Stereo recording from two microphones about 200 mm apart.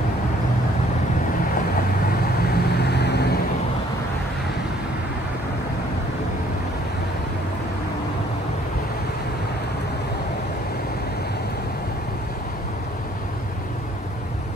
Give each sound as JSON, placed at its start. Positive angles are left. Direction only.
{"t": 2.4, "sound": "vehicle", "side_deg": 55}